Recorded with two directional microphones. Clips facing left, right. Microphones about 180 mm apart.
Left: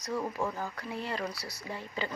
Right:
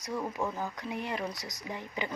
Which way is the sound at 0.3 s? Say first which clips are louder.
Even; 15° right (ahead or behind).